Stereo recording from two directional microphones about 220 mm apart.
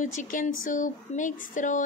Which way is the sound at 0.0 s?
35° left (ahead or behind).